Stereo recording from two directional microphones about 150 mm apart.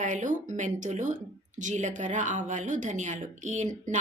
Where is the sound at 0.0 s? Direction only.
55° right (ahead or behind).